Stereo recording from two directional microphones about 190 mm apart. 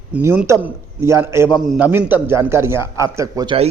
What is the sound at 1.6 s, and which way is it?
A man's voice, centre (ahead or behind).